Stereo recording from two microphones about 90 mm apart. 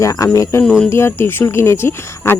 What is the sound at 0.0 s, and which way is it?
Speech, 40° left (ahead or behind).